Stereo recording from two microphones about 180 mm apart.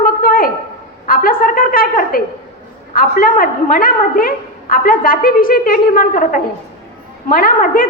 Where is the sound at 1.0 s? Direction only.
50° left (ahead or behind).